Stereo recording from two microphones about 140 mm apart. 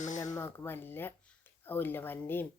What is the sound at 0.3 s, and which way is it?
Speech, 20° left (ahead or behind).